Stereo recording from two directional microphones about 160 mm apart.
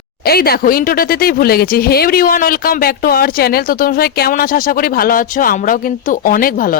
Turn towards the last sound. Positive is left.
turn(degrees=60)  # may be behind; listen again after turning